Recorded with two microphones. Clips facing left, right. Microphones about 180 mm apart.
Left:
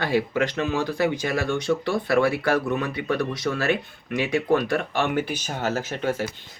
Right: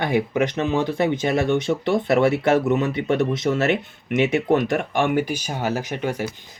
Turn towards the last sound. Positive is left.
turn(degrees=-15)  # may be behind; listen again after turning